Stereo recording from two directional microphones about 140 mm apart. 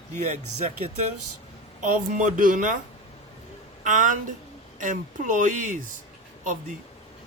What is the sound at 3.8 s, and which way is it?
Speech, 65° right (ahead or behind).